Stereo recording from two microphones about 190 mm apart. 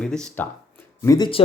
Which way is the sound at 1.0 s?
20° left (ahead or behind).